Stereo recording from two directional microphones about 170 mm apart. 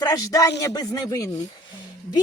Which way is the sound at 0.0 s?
20° left (ahead or behind).